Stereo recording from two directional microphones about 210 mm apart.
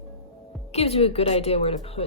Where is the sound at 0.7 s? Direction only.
30° left (ahead or behind).